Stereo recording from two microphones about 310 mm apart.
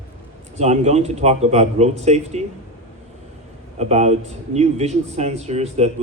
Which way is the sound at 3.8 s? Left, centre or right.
Right.